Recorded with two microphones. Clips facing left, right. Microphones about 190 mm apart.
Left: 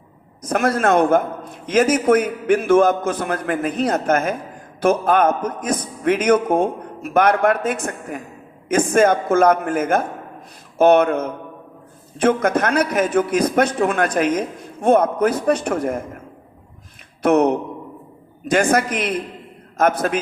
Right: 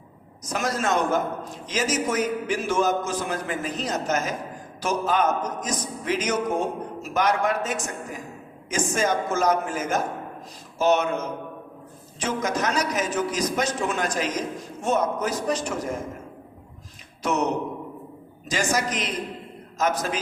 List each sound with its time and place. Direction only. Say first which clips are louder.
0.4 s a man's voice: left 8 dB; 55° left (ahead or behind)
17.2 s a man's voice: left 9 dB; 55° left (ahead or behind)